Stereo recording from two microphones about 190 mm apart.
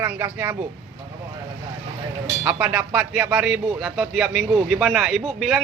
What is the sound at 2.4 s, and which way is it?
Speech, 10° right (ahead or behind).